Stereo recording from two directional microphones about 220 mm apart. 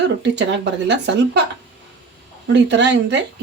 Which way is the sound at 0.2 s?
55° right (ahead or behind).